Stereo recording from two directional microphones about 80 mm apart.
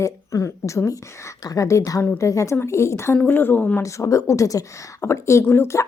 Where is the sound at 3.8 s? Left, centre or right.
Left.